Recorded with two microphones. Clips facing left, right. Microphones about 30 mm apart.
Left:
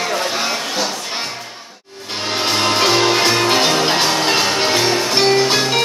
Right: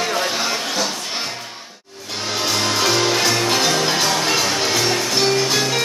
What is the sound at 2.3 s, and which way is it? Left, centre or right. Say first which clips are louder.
Music: left 3 dB; left.